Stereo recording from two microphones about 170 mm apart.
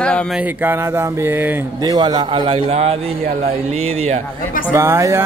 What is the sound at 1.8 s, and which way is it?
A man's voice, 20° right (ahead or behind).